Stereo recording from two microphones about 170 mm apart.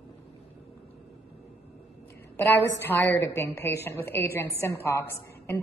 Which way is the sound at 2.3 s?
15° left (ahead or behind).